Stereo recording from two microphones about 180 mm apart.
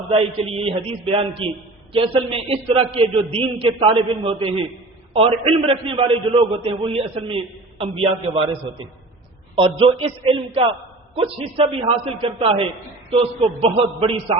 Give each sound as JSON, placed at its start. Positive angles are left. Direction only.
{"t": 0.1, "sound": "a man's voice", "side_deg": -30}
{"t": 9.6, "sound": "a man's voice", "side_deg": -30}